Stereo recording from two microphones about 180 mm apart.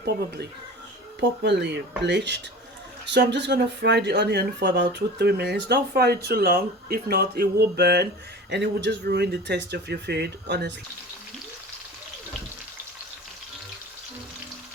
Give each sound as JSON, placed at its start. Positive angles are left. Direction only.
{"t": 1.5, "sound": "speech", "side_deg": -70}